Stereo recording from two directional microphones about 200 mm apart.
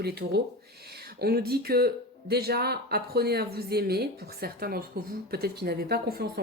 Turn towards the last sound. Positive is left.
turn(degrees=-50)  # may be behind; listen again after turning